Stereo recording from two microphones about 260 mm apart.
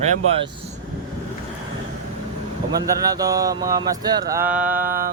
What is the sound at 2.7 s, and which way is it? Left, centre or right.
Speech, centre.